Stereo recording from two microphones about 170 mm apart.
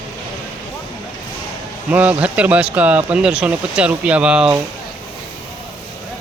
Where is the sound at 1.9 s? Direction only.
10° right (ahead or behind).